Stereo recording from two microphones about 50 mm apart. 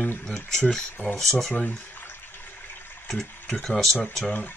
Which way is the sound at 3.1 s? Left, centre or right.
Centre.